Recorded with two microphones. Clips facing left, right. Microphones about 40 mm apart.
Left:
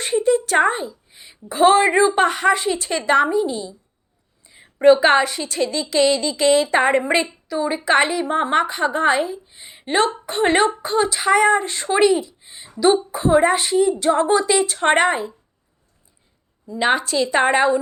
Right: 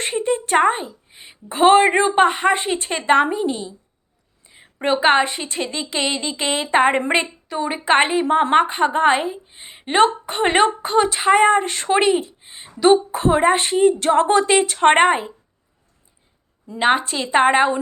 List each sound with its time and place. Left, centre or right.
0.0 s a woman's voice: right
2.1 s a woman's voice: right
4.4 s a woman's voice: right
11.9 s a woman's voice: right
16.7 s a woman's voice: right